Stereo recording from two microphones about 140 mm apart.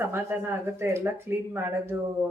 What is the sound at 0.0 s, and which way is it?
Speech, 15° right (ahead or behind).